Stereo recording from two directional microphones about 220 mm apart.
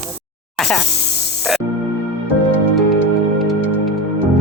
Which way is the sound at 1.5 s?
5° right (ahead or behind).